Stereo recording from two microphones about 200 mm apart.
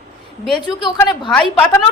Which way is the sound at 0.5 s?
25° left (ahead or behind).